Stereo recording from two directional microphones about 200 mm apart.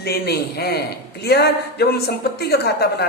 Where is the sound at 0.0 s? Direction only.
50° left (ahead or behind).